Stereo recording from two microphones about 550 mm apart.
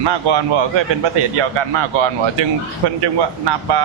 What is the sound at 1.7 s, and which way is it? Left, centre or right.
Speech, right.